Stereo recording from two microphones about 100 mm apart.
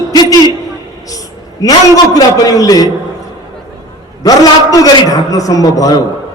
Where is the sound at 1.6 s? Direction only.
35° left (ahead or behind).